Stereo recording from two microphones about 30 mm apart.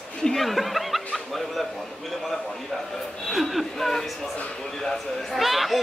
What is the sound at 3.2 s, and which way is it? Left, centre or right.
Speech, centre.